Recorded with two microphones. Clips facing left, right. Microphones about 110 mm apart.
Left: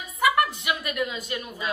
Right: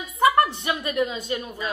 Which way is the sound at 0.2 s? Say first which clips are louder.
Right 4 dB; 30° right (ahead or behind).